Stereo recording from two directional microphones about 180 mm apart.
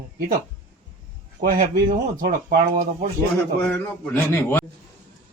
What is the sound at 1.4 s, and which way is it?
Speech, 50° right (ahead or behind).